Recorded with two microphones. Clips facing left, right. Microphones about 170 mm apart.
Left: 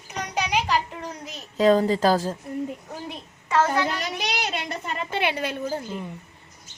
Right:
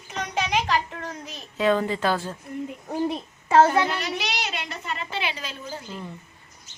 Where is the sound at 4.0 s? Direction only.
45° left (ahead or behind).